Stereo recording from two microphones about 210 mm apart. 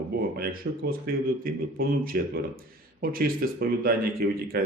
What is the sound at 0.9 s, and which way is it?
Speech, 45° right (ahead or behind).